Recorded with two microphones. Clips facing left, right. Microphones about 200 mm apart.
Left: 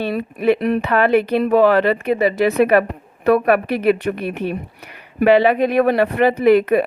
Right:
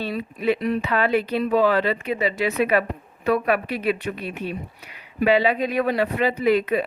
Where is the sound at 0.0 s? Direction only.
60° left (ahead or behind).